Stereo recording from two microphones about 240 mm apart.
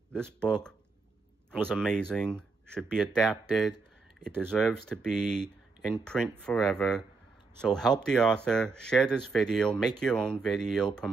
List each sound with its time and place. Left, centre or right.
0.1 s speech: centre
4.5 s speech: centre